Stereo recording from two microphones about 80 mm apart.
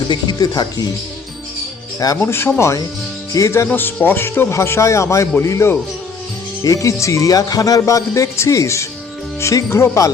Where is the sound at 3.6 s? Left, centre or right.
Left.